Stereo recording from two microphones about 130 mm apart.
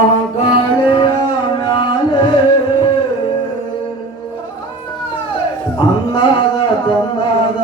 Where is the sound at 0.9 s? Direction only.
35° left (ahead or behind).